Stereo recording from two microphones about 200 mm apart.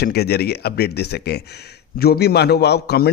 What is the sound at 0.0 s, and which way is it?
A man's voice, 55° left (ahead or behind).